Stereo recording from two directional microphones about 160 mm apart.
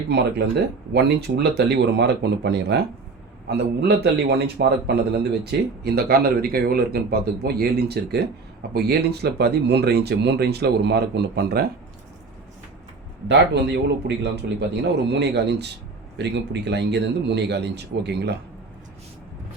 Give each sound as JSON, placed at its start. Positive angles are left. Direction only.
{"t": 0.1, "sound": "speech", "side_deg": -90}
{"t": 13.2, "sound": "speech", "side_deg": -90}